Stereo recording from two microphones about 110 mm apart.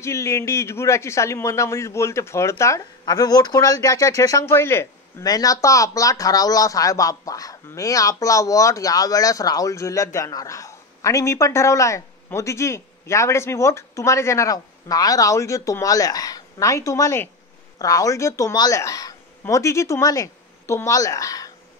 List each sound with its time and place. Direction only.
0.0 s speech: 25° left (ahead or behind)
5.2 s speech: 35° left (ahead or behind)